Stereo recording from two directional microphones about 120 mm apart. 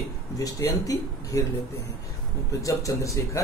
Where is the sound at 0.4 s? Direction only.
30° left (ahead or behind).